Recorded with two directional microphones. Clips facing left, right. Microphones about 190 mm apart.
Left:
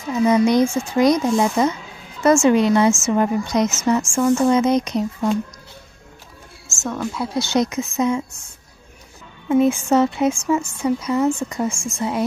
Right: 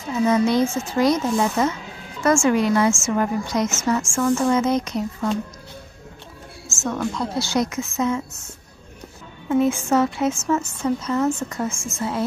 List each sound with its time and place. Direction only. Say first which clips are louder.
0.2 s a woman's voice: left 3 dB; 15° left (ahead or behind)
6.8 s a woman's voice: even; 5° left (ahead or behind)
7.3 s a woman's voice: left 5 dB; 20° left (ahead or behind)
9.5 s speech: left 3 dB; 15° left (ahead or behind)
11.7 s a woman's voice: left 3 dB; 5° right (ahead or behind)